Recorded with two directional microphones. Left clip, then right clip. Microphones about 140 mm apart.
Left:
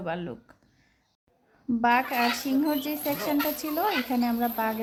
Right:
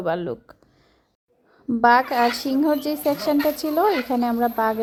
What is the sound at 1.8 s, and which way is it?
A woman's voice, 30° right (ahead or behind).